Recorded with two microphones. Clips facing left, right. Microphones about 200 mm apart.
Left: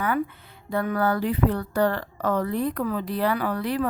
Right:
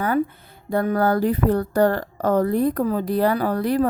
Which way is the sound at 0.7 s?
40° right (ahead or behind).